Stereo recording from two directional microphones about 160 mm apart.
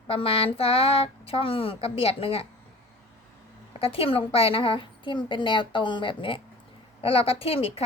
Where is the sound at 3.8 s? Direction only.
35° left (ahead or behind).